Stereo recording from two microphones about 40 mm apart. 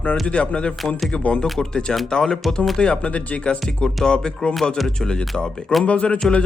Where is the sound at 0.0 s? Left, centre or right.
Left.